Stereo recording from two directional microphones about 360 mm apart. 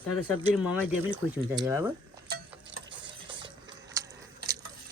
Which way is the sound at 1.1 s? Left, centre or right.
Centre.